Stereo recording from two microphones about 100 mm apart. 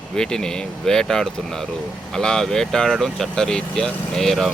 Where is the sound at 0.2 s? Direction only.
5° left (ahead or behind).